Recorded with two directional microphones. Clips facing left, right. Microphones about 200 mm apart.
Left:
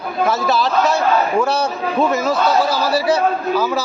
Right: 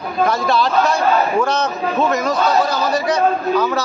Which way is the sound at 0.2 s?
5° left (ahead or behind).